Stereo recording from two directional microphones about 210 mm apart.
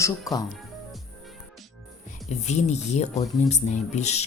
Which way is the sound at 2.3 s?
30° left (ahead or behind).